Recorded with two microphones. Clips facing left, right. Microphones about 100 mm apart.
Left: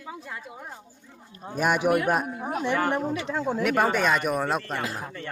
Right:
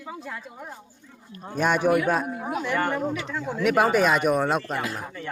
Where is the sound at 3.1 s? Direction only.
35° left (ahead or behind).